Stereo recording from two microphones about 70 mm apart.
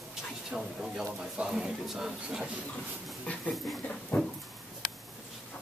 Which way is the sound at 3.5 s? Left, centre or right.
Centre.